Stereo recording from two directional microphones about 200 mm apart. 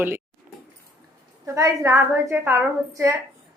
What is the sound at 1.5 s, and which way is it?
A woman's voice, 15° right (ahead or behind).